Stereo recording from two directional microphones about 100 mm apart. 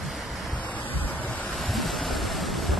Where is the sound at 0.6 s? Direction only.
15° left (ahead or behind).